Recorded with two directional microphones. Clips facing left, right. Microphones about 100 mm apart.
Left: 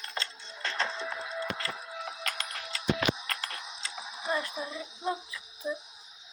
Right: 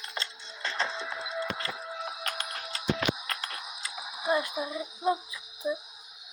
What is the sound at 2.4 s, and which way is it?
Music, 30° right (ahead or behind).